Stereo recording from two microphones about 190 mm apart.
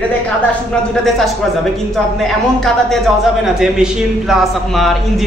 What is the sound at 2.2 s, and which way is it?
Speech, centre (ahead or behind).